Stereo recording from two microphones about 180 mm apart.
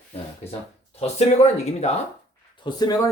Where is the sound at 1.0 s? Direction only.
35° left (ahead or behind).